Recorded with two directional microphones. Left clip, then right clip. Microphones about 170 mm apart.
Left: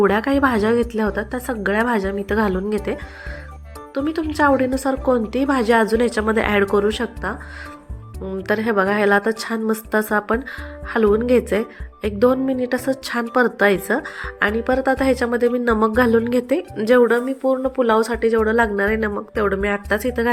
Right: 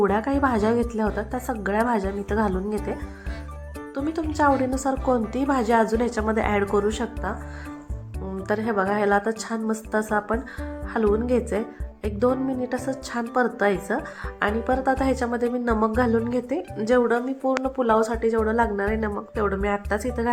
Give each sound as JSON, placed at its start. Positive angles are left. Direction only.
{"t": 0.0, "sound": "speech", "side_deg": 15}
{"t": 8.4, "sound": "a woman's voice", "side_deg": 20}